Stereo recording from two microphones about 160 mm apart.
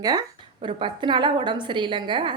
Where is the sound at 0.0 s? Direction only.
25° right (ahead or behind).